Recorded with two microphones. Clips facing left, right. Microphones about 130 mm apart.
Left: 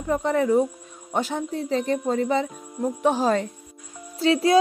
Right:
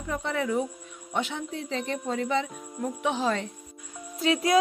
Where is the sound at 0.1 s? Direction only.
40° left (ahead or behind).